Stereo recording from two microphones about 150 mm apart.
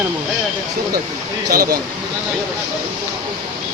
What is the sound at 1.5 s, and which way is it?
Speech, 80° right.